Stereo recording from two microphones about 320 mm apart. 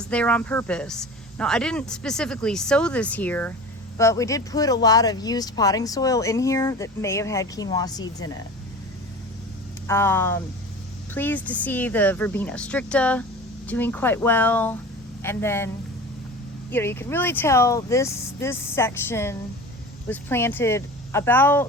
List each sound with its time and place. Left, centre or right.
0.0 s speech: centre
9.8 s speech: centre
16.7 s speech: centre